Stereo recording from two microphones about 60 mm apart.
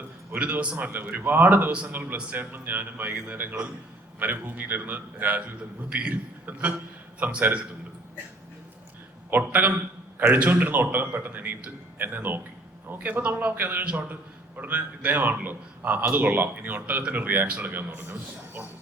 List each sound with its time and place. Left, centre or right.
0.3 s a man's voice: right
1.7 s a man's voice: right
7.2 s a man's voice: right
9.3 s a man's voice: right